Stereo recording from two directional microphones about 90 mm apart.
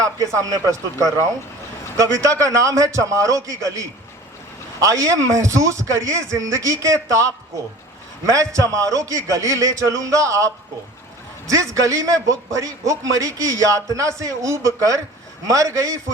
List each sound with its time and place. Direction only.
0.0 s a man's voice: 40° right (ahead or behind)